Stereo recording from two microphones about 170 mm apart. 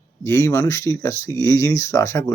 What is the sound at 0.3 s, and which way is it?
Speech, 15° left (ahead or behind).